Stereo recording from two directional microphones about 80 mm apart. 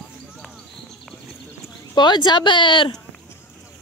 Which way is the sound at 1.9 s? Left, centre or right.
Left.